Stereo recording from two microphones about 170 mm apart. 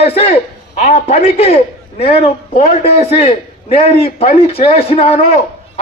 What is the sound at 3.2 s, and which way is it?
A man's voice, 35° left (ahead or behind).